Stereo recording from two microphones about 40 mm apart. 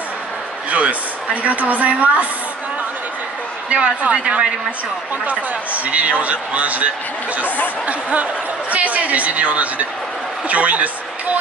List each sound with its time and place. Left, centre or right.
0.7 s speech: right
3.7 s speech: right
5.2 s speech: right
7.4 s a sound: left
7.8 s speech: right